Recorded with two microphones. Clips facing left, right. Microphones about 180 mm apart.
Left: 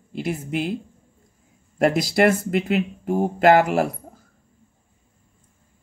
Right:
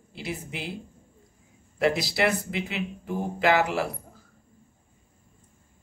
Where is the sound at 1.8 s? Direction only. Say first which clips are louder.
Left 6 dB; 50° left (ahead or behind).